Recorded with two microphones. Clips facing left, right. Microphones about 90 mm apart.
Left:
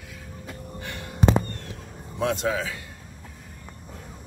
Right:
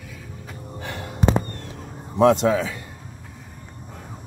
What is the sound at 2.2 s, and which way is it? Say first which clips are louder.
Speech: right 10 dB; 70° right (ahead or behind).